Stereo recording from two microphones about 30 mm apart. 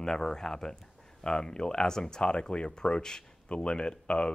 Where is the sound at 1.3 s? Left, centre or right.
Left.